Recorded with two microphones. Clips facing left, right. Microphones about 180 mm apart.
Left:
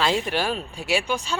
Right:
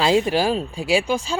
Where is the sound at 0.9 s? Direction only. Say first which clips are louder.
Right 4 dB; 90° right.